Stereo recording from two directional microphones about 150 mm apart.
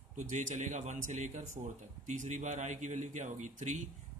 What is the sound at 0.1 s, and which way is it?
A man's voice, 55° right (ahead or behind).